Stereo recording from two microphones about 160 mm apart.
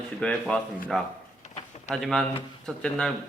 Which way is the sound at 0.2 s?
5° left (ahead or behind).